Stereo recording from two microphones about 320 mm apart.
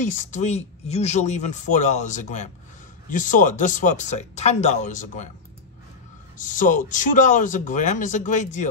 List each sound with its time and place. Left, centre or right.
0.0 s speech: left
6.3 s speech: left